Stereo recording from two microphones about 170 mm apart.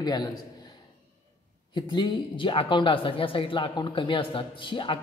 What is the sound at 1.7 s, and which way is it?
Speech, 25° left (ahead or behind).